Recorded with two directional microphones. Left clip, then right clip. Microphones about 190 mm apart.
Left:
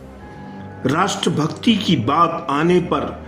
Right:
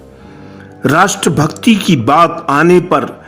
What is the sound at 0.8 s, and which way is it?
A man's voice, 50° right (ahead or behind).